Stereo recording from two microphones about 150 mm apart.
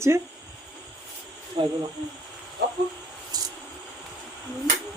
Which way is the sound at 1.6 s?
40° right (ahead or behind).